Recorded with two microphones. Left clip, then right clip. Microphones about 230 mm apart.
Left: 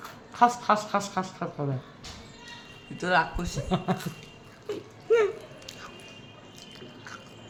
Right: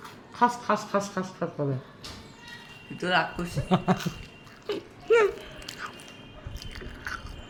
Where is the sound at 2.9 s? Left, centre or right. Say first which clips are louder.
Left 1 dB; centre.